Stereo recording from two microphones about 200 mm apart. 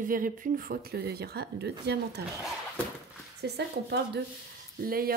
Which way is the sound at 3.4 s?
55° right (ahead or behind).